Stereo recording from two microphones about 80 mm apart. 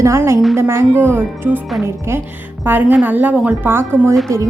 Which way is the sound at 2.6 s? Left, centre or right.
Right.